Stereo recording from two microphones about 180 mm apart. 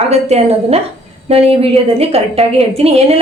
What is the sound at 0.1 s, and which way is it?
A woman's voice, 35° right (ahead or behind).